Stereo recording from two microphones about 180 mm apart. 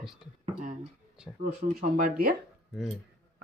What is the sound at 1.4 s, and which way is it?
Speech, 50° right (ahead or behind).